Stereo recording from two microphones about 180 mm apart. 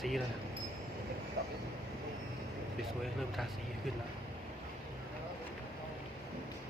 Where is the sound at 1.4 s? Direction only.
60° right (ahead or behind).